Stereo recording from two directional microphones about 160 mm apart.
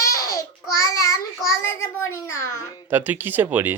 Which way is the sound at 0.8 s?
20° left (ahead or behind).